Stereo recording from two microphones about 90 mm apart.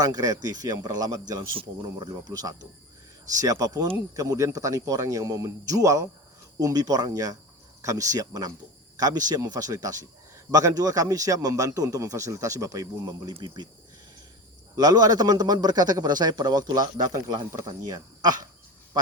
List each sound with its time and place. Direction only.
0.0 s a man's voice: 40° right (ahead or behind)
14.8 s a man's voice: 45° right (ahead or behind)